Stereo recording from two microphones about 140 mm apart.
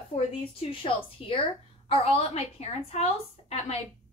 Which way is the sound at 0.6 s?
40° left (ahead or behind).